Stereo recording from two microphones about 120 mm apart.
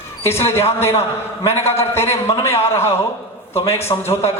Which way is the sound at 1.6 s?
20° left (ahead or behind).